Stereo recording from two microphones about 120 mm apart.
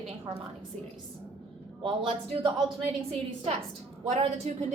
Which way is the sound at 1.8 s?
45° right (ahead or behind).